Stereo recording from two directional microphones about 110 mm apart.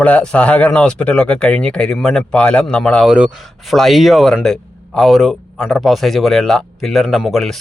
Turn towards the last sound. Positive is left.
turn(degrees=0)  # may be behind; listen again after turning